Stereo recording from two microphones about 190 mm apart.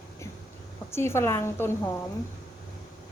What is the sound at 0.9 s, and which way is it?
Speech, 15° left (ahead or behind).